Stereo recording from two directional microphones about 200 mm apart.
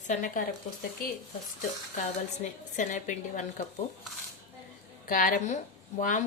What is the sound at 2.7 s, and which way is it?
Speech, 40° left (ahead or behind).